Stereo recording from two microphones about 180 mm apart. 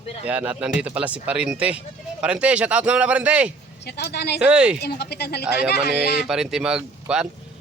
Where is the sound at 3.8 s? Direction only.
65° left (ahead or behind).